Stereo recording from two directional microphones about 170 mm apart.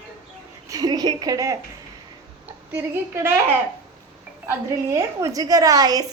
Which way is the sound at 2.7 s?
15° right (ahead or behind).